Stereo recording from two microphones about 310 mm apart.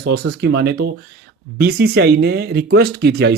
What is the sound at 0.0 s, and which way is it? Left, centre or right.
Speech, right.